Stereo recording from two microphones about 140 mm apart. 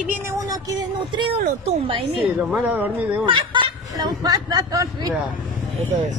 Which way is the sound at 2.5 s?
10° right (ahead or behind).